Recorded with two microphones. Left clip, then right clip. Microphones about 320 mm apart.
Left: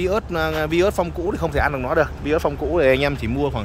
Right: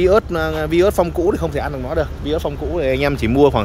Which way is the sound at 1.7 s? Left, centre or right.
Centre.